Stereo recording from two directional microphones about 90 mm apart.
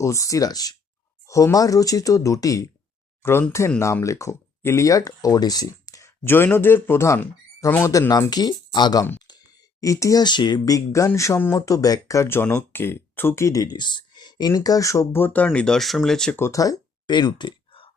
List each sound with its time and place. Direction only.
0.0 s speech: 35° left (ahead or behind)
6.2 s speech: 25° left (ahead or behind)
8.3 s speech: 50° left (ahead or behind)
9.8 s speech: 35° left (ahead or behind)
10.2 s speech: 55° left (ahead or behind)
10.7 s speech: 35° left (ahead or behind)
11.3 s speech: 25° left (ahead or behind)
11.6 s speech: 40° left (ahead or behind)
13.7 s speech: 55° left (ahead or behind); by 16.4 s 5° left (ahead or behind)
16.4 s speech: 40° left (ahead or behind)
17.1 s a sound: 55° left (ahead or behind)